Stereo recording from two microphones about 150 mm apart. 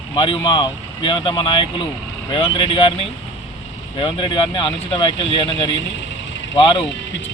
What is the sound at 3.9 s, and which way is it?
Speech, 35° left (ahead or behind).